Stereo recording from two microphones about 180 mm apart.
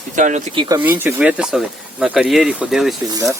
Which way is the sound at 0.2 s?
45° right (ahead or behind).